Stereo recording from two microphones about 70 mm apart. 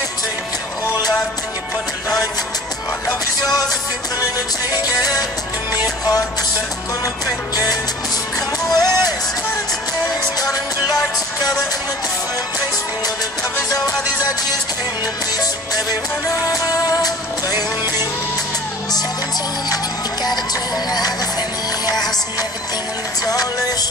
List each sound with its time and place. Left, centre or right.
4.8 s music: left
8.6 s music: left
12.5 s music: left
16.4 s music: left
17.5 s music: right
20.7 s music: left
23.2 s music: left